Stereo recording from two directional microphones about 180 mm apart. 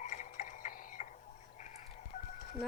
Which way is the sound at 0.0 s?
40° left (ahead or behind).